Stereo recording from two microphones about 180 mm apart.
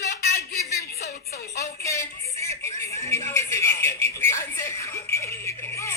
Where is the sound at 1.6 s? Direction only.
15° left (ahead or behind).